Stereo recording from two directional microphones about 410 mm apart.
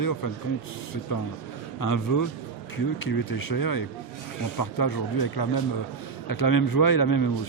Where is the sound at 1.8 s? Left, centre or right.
Left.